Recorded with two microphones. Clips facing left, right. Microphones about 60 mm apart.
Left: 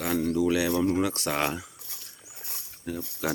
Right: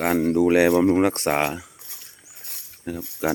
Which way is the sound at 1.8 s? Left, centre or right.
Centre.